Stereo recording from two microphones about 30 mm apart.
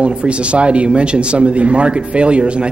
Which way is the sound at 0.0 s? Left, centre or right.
Right.